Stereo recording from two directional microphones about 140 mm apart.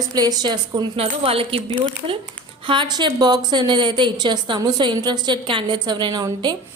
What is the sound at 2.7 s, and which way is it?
A woman's voice, 35° right (ahead or behind).